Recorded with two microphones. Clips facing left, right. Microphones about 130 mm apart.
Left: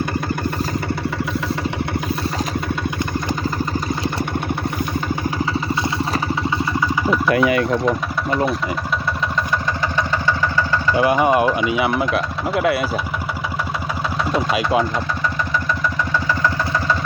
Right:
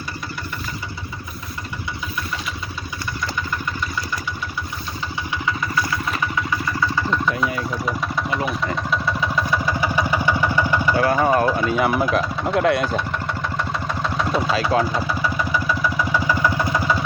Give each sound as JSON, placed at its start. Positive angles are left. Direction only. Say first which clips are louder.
{"t": 5.5, "sound": "vehicle", "louder": "left 3 dB", "side_deg": 30}
{"t": 10.9, "sound": "speech", "louder": "left 3 dB", "side_deg": 15}
{"t": 14.5, "sound": "speech", "louder": "left 1 dB", "side_deg": 10}